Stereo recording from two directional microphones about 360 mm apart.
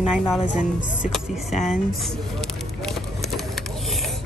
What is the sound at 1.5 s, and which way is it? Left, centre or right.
Speech, centre.